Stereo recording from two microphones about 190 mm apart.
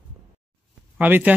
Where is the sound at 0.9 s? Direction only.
10° right (ahead or behind).